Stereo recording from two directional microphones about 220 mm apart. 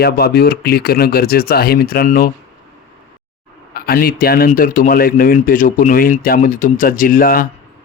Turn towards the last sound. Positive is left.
turn(degrees=40)  # may be behind; listen again after turning